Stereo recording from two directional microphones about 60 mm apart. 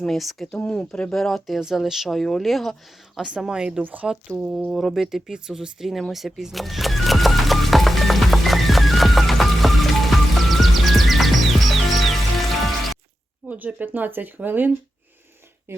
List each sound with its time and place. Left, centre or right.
0.0 s speech: centre
0.6 s speech: centre
1.1 s speech: centre
1.5 s speech: centre
3.2 s speech: centre
3.8 s speech: right
4.4 s speech: centre
4.7 s a sound: centre
13.5 s speech: right